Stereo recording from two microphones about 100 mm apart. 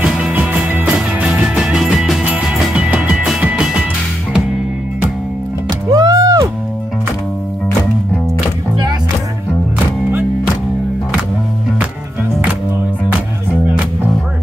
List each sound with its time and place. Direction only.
0.3 s music: 15° right (ahead or behind)
5.7 s music: 40° right (ahead or behind)